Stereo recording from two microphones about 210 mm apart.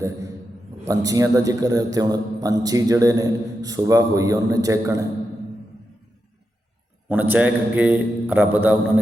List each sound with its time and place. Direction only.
0.9 s a man's voice: 15° right (ahead or behind)
7.1 s a man's voice: 10° right (ahead or behind)